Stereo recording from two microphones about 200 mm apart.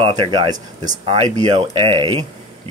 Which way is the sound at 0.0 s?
25° right (ahead or behind).